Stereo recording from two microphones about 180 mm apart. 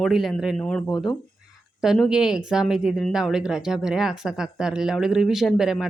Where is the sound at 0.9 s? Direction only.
20° left (ahead or behind).